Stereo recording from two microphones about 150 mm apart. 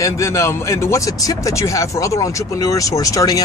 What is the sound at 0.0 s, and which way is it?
Speech, 20° left (ahead or behind).